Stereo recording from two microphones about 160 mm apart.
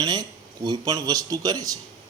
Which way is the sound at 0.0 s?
25° right (ahead or behind).